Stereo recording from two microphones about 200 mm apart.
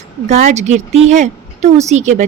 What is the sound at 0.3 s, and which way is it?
Speech, 35° right (ahead or behind).